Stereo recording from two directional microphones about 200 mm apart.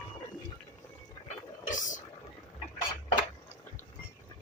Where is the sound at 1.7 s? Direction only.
40° left (ahead or behind).